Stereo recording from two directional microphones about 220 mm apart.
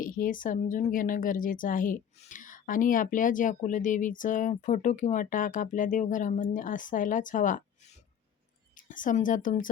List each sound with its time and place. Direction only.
0.0 s speech: 40° left (ahead or behind)
8.7 s a woman's voice: 35° left (ahead or behind)